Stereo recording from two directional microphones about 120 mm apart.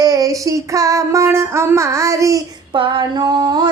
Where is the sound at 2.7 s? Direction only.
45° right (ahead or behind).